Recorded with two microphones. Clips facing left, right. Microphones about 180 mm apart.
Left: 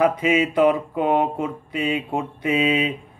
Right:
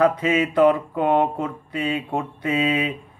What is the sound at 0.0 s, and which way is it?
Speech, 15° left (ahead or behind).